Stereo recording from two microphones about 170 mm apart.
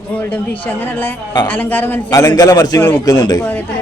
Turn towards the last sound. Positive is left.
turn(degrees=20)  # may be behind; listen again after turning